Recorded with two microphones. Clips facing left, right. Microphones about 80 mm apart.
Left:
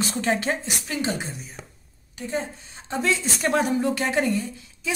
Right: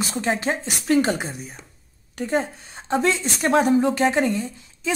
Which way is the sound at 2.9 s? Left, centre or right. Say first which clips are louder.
Right 4 dB; right.